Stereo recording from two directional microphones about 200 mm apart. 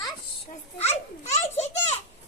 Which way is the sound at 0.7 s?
30° left (ahead or behind).